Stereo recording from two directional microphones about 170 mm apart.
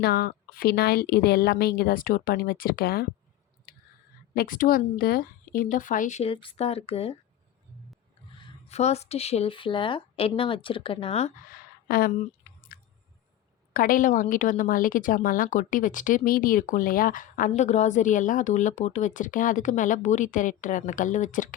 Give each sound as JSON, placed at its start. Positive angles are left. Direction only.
{"t": 0.0, "sound": "a woman's voice", "side_deg": 65}
{"t": 3.7, "sound": "a sound", "side_deg": 60}
{"t": 4.4, "sound": "a woman's voice", "side_deg": 55}
{"t": 6.3, "sound": "speech", "side_deg": 30}
{"t": 8.4, "sound": "speech", "side_deg": 35}
{"t": 11.5, "sound": "a sound", "side_deg": 60}
{"t": 13.7, "sound": "a woman's voice", "side_deg": 55}